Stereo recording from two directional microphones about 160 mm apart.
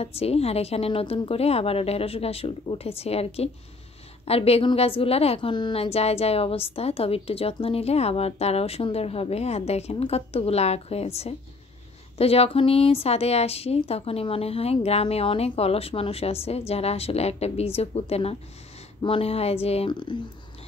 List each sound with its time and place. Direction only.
0.0 s a woman's voice: 40° left (ahead or behind)